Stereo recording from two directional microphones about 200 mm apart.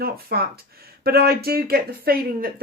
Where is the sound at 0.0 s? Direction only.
50° right (ahead or behind).